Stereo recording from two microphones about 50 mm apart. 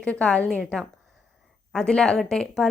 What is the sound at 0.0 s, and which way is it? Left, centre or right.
Speech, left.